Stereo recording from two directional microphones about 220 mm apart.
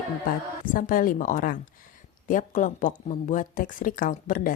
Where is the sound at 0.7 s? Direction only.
40° left (ahead or behind).